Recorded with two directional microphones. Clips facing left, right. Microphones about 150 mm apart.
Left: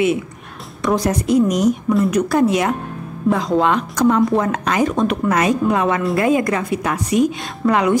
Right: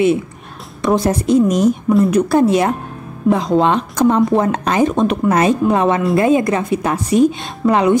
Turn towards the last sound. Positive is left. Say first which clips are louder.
# right 3 dB
turn(degrees=-25)  # may be behind; listen again after turning